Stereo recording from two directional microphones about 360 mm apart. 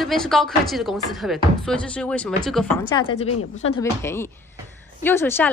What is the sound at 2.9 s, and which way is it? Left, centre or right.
Speech, centre.